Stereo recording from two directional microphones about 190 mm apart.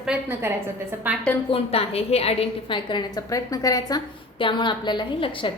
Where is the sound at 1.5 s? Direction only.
30° left (ahead or behind).